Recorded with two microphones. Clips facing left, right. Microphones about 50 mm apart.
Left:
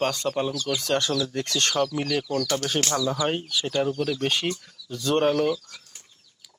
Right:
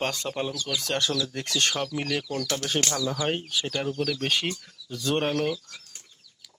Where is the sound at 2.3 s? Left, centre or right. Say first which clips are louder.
Left 3 dB; centre.